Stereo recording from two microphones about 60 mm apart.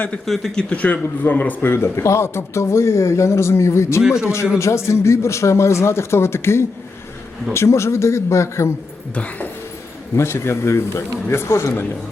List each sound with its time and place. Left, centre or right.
0.5 s speech: centre
1.2 s a man's voice: left
4.0 s a man's voice: centre
4.5 s a man's voice: left
9.1 s speech: left
10.2 s a man's voice: left